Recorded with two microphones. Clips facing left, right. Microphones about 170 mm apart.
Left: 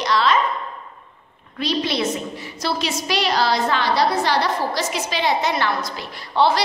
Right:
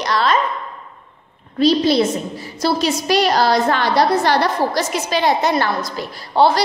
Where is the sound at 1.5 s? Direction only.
35° right (ahead or behind).